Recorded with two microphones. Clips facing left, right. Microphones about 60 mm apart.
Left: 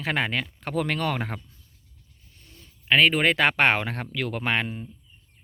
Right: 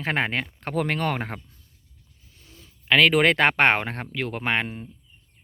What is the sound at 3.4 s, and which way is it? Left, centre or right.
Speech, right.